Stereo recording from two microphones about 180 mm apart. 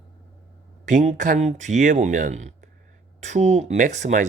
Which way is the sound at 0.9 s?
45° right (ahead or behind).